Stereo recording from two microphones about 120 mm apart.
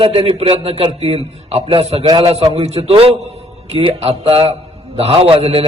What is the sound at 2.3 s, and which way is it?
A man's voice, 65° right (ahead or behind).